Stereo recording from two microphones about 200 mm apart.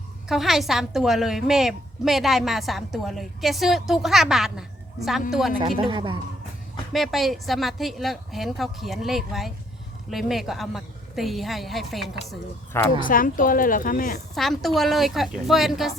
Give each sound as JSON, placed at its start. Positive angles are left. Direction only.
{"t": 0.3, "sound": "a woman's voice", "side_deg": 0}
{"t": 5.5, "sound": "speech", "side_deg": -25}
{"t": 6.9, "sound": "a woman's voice", "side_deg": 0}
{"t": 13.0, "sound": "a woman's voice", "side_deg": 45}
{"t": 14.3, "sound": "a woman's voice", "side_deg": 0}